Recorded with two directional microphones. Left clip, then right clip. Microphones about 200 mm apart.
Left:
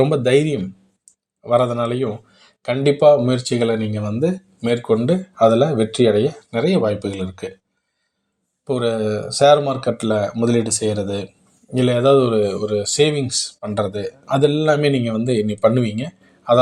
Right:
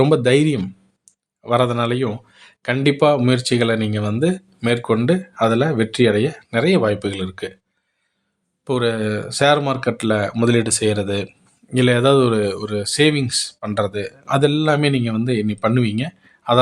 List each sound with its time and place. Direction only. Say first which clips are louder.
0.0 s a man's voice: right 1 dB; 20° right (ahead or behind)
8.6 s a man's voice: even; 20° right (ahead or behind)